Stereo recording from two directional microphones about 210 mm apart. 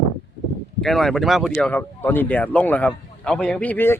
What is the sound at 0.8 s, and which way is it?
Speech, centre (ahead or behind).